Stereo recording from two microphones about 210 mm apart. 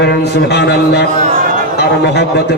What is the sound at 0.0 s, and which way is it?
A man's voice, 55° left (ahead or behind).